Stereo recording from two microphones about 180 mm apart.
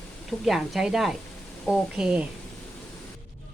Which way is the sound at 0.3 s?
Centre (ahead or behind).